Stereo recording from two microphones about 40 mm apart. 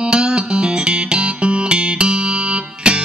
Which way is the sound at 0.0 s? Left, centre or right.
Right.